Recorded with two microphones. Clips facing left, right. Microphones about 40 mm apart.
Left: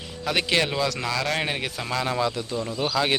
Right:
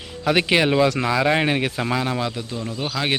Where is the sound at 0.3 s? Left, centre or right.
Centre.